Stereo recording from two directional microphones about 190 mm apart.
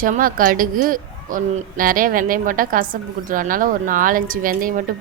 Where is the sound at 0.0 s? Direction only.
45° right (ahead or behind).